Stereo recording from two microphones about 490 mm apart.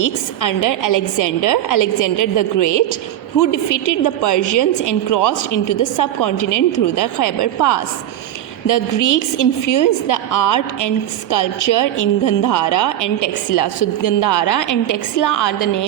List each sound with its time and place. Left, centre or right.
0.0 s a woman's voice: left